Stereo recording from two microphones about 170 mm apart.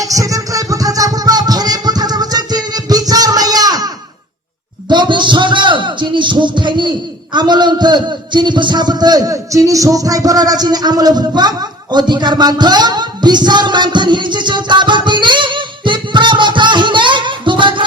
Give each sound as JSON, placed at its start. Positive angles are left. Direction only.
{"t": 0.0, "sound": "music", "side_deg": -20}
{"t": 4.9, "sound": "a man's voice", "side_deg": -25}